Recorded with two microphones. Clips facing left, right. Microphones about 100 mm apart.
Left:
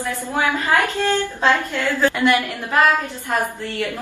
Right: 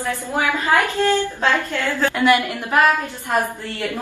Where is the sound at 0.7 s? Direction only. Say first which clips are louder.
Right 3 dB; 20° right (ahead or behind).